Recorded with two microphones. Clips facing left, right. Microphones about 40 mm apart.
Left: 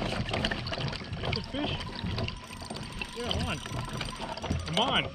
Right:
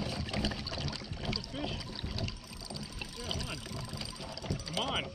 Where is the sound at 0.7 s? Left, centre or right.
Left.